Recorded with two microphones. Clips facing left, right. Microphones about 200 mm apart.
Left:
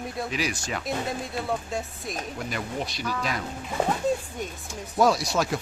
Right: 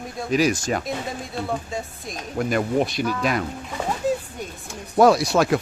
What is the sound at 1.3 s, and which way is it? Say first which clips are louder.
Speech: right 4 dB; centre (ahead or behind).